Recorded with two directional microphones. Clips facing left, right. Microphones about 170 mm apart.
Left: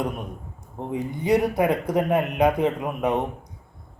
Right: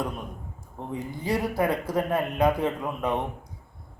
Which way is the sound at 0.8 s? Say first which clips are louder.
Left 5 dB; 20° left (ahead or behind).